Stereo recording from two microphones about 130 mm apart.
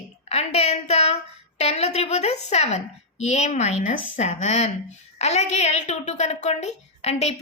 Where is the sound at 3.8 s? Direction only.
70° left (ahead or behind).